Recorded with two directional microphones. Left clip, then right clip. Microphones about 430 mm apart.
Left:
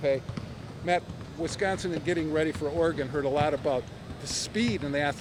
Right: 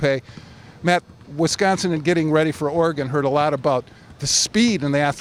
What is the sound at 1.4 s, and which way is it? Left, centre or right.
Speech, right.